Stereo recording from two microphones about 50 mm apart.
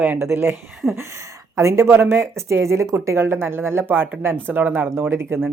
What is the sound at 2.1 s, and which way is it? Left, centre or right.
Speech, right.